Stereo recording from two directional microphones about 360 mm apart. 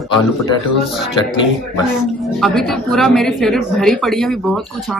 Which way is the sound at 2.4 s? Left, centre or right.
Centre.